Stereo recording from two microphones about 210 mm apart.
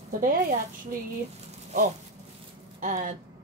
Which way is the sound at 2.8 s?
40° right (ahead or behind).